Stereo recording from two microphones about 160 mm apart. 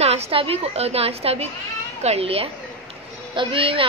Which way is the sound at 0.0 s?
40° right (ahead or behind).